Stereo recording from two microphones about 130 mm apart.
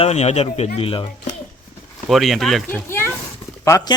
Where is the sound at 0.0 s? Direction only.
55° left (ahead or behind).